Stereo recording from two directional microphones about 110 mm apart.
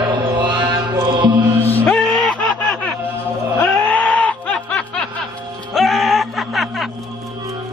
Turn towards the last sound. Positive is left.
turn(degrees=0)  # may be behind; listen again after turning